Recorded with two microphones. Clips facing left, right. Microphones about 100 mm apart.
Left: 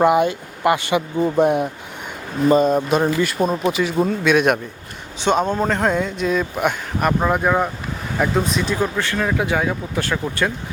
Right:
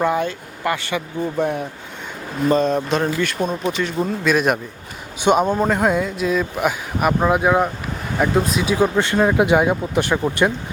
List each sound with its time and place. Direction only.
0.0 s speech: 15° left (ahead or behind)
2.5 s speech: 5° left (ahead or behind)
5.2 s speech: 10° right (ahead or behind)
8.8 s speech: 20° right (ahead or behind)